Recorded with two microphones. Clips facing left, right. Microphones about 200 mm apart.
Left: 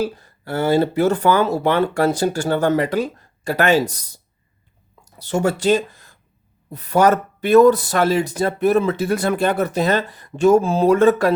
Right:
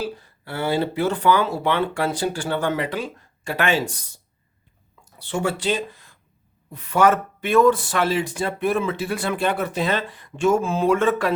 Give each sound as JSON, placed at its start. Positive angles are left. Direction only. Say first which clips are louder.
{"t": 0.0, "sound": "speech", "louder": "left 6 dB", "side_deg": 45}